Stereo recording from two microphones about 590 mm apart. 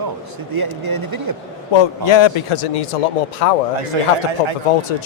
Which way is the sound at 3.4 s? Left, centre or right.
Left.